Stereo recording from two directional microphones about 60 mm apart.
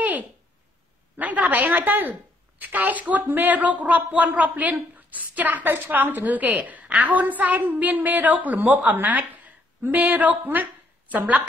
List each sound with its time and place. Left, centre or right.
1.1 s a woman's voice: right